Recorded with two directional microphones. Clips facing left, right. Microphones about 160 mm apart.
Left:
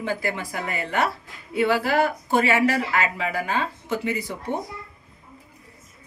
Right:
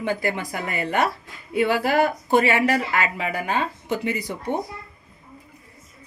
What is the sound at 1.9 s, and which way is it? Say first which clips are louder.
Speech: right 2 dB; 15° right (ahead or behind).